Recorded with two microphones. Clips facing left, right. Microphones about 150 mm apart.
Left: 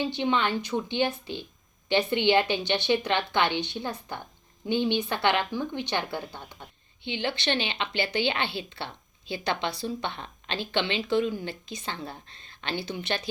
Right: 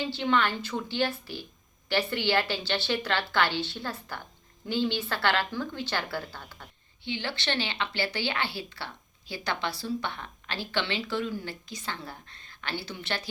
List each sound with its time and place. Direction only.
0.0 s a woman's voice: 20° left (ahead or behind)